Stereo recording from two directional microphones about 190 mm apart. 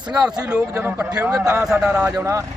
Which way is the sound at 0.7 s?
15° right (ahead or behind).